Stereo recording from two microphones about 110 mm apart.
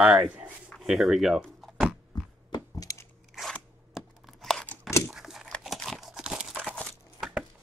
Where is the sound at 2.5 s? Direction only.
30° left (ahead or behind).